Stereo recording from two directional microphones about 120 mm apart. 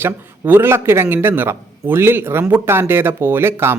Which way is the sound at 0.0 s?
20° right (ahead or behind).